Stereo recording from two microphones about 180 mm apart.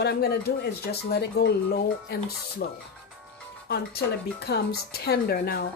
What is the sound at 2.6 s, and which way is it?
Speech, 60° left (ahead or behind).